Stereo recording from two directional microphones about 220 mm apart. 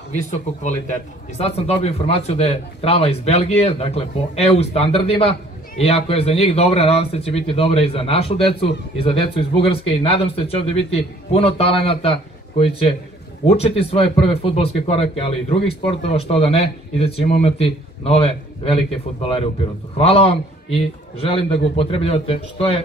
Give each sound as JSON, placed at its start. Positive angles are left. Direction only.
{"t": 0.1, "sound": "a man's voice", "side_deg": 35}